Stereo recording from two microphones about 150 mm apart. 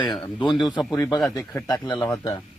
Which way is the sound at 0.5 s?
Centre (ahead or behind).